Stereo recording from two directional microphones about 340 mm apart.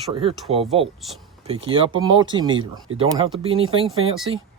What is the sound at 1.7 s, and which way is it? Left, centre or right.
Speech, centre.